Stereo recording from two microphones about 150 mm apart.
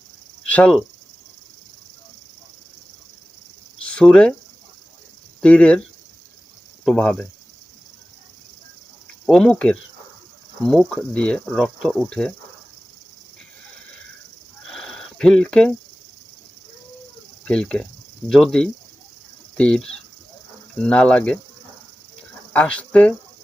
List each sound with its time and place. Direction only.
0.4 s speech: 10° left (ahead or behind)
3.8 s speech: 5° left (ahead or behind)
5.4 s speech: 10° left (ahead or behind)
6.8 s speech: 5° left (ahead or behind)
9.2 s speech: 5° left (ahead or behind)
14.7 s a sound: 5° left (ahead or behind)
17.4 s speech: 5° left (ahead or behind)
22.5 s speech: 10° left (ahead or behind)